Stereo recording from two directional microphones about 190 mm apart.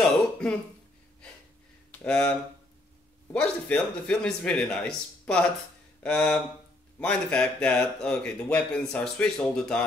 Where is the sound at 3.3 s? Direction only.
5° left (ahead or behind).